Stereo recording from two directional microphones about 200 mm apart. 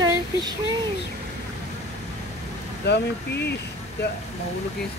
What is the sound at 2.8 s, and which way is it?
Speech, 55° left (ahead or behind).